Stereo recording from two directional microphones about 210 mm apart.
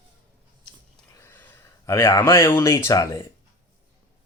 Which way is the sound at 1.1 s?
10° left (ahead or behind).